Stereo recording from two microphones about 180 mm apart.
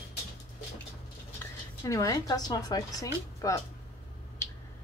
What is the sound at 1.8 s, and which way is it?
Speech, 15° left (ahead or behind).